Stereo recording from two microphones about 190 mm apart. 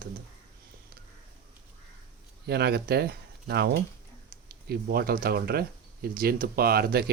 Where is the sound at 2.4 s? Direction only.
60° right (ahead or behind).